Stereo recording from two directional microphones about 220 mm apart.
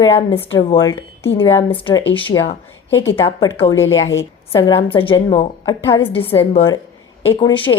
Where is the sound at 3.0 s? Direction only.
10° left (ahead or behind).